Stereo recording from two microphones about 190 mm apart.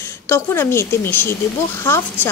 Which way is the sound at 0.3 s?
15° left (ahead or behind).